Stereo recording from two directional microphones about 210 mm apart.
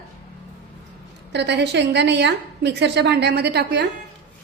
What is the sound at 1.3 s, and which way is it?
A woman's voice, 55° right (ahead or behind).